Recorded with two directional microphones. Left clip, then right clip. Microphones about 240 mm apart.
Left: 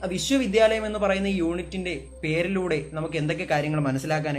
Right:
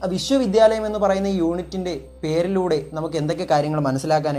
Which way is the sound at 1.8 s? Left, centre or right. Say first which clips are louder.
Right 3 dB; centre.